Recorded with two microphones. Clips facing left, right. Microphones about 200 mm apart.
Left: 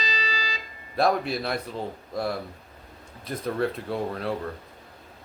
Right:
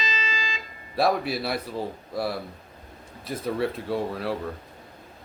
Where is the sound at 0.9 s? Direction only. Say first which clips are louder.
Even; 5° right (ahead or behind).